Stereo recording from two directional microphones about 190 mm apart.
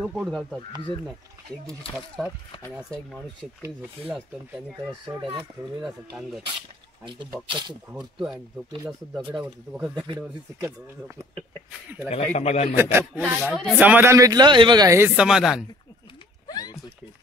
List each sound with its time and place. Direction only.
0.0 s speech: centre (ahead or behind)
2.7 s speech: 5° left (ahead or behind)
5.0 s speech: 25° right (ahead or behind)
5.9 s speech: centre (ahead or behind)
7.9 s speech: 5° right (ahead or behind)
10.0 s speech: 20° right (ahead or behind)
12.1 s a man's voice: 35° left (ahead or behind)
12.7 s speech: 10° right (ahead or behind)
13.4 s speech: centre (ahead or behind); by 15.0 s 20° right (ahead or behind)
15.1 s speech: 5° right (ahead or behind)
16.4 s a sound: 20° left (ahead or behind)